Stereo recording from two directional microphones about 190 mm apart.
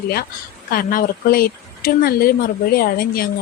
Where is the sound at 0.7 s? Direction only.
50° left (ahead or behind).